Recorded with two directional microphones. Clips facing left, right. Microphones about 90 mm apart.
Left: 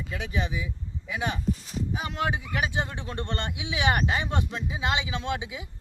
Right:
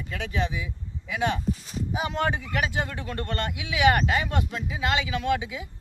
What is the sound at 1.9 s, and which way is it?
Speech, centre (ahead or behind).